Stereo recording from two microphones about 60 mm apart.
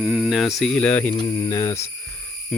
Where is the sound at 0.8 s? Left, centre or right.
Left.